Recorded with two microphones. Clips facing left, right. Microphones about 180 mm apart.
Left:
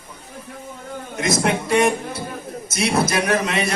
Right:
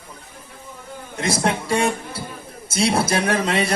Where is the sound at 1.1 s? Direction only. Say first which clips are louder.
Left 1 dB; 30° right (ahead or behind).